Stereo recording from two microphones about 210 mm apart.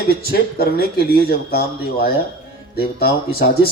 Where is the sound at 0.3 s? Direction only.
50° left (ahead or behind).